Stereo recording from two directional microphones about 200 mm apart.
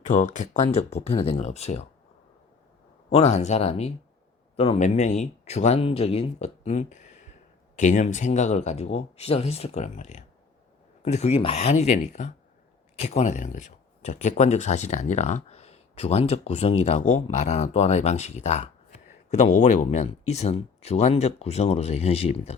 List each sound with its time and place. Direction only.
0.1 s speech: 40° left (ahead or behind)
3.1 s speech: 30° left (ahead or behind)